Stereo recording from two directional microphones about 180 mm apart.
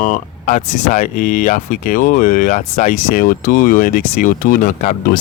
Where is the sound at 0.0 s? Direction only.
45° left (ahead or behind).